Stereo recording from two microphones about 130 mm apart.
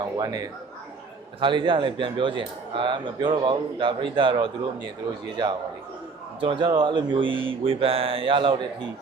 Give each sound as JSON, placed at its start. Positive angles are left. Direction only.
{"t": 0.0, "sound": "a man's voice", "side_deg": -30}
{"t": 6.4, "sound": "a man's voice", "side_deg": -40}